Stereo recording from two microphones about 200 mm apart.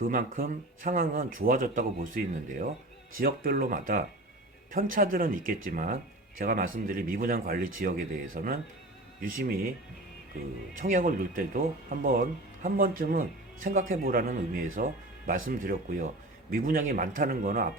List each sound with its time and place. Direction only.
0.0 s a man's voice: 45° right (ahead or behind)
10.8 s a man's voice: 40° right (ahead or behind)